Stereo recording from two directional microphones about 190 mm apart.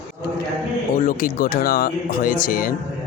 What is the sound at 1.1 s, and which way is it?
Speech, 50° left (ahead or behind).